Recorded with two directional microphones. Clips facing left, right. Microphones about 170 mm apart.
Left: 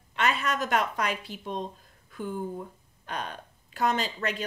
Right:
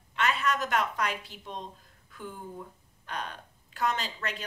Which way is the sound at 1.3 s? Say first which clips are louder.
Left 8 dB; 10° left (ahead or behind).